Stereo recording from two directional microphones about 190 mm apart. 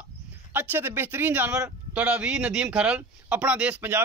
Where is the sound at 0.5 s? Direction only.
10° right (ahead or behind).